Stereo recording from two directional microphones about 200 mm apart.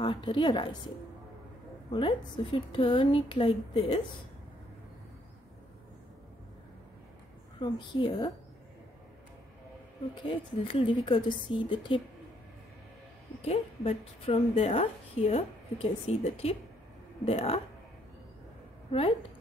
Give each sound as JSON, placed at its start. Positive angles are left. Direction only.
{"t": 0.0, "sound": "a woman's voice", "side_deg": 25}
{"t": 1.9, "sound": "a woman's voice", "side_deg": 25}
{"t": 7.6, "sound": "a woman's voice", "side_deg": 20}
{"t": 10.2, "sound": "a woman's voice", "side_deg": 25}
{"t": 13.4, "sound": "a woman's voice", "side_deg": 30}
{"t": 18.9, "sound": "a woman's voice", "side_deg": 30}